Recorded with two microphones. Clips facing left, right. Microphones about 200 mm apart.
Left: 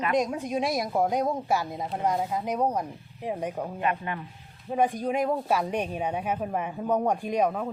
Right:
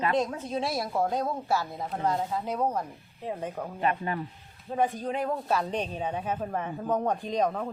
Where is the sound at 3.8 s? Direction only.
35° right (ahead or behind).